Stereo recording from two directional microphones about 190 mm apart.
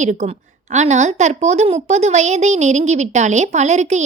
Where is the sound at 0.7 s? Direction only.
35° right (ahead or behind).